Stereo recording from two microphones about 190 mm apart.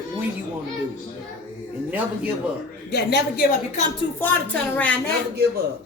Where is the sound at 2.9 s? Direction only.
55° left (ahead or behind).